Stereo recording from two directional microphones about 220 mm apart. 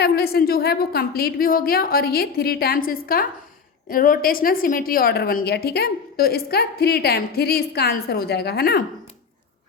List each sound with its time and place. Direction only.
0.0 s a woman's voice: 45° left (ahead or behind)